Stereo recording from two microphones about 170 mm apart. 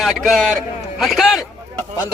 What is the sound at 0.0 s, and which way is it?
A man's voice, centre (ahead or behind).